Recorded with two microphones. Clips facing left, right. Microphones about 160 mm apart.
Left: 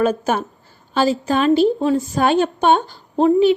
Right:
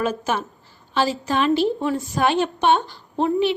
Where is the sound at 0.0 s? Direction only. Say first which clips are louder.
Left 5 dB; 50° left (ahead or behind).